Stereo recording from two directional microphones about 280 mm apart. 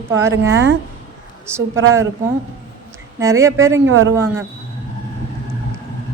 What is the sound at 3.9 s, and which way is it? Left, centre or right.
Speech, right.